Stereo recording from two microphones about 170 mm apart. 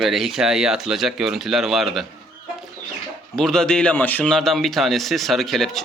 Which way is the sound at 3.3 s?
5° left (ahead or behind).